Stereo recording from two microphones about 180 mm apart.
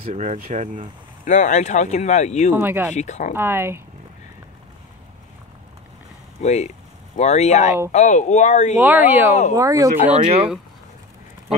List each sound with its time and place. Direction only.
0.1 s speech: 40° right (ahead or behind)
1.2 s speech: 45° left (ahead or behind)
2.5 s speech: 10° right (ahead or behind)
2.9 s speech: 40° left (ahead or behind)
3.3 s speech: 15° right (ahead or behind)
6.4 s speech: 40° left (ahead or behind)
8.7 s speech: 10° right (ahead or behind)
10.1 s speech: 35° right (ahead or behind)